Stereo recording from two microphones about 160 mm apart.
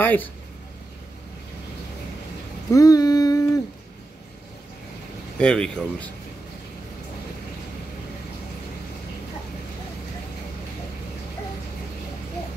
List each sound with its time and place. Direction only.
0.0 s speech: 10° left (ahead or behind)
2.7 s a sound: 20° left (ahead or behind)
5.4 s speech: 5° left (ahead or behind)